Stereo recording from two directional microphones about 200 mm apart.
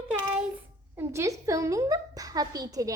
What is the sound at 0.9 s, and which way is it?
A woman's voice, 15° right (ahead or behind).